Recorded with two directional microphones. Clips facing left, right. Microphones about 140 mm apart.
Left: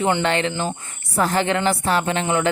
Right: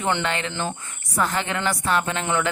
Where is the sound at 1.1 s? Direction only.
35° left (ahead or behind).